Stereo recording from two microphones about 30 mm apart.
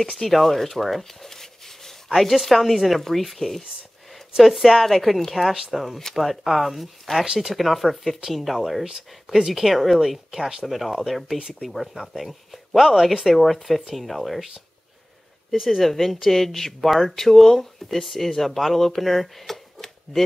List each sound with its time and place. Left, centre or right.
0.0 s speech: centre
1.3 s a sound: centre
2.0 s speech: centre
8.8 s speech: centre
9.5 s speech: centre
15.5 s speech: centre
15.8 s speech: centre